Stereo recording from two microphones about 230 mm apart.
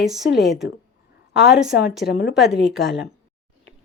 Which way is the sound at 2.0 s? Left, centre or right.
Left.